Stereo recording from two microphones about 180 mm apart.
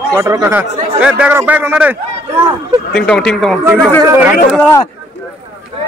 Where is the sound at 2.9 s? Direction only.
5° left (ahead or behind).